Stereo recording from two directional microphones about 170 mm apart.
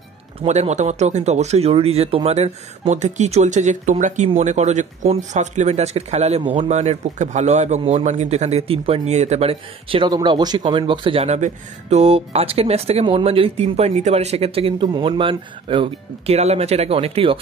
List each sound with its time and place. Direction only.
0.4 s a man's voice: 40° right (ahead or behind)